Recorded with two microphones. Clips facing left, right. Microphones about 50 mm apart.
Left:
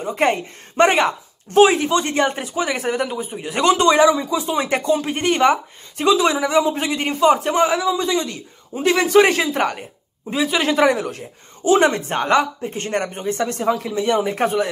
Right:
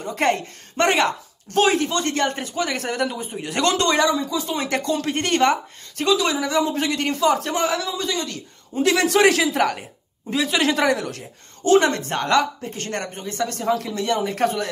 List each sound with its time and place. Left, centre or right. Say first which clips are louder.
0.0 s speech: left 2 dB; centre
6.0 s a man's voice: left 4 dB; left
8.7 s a man's voice: left 3 dB; centre; by 13.7 s left
13.7 s a man's voice: left 3 dB; centre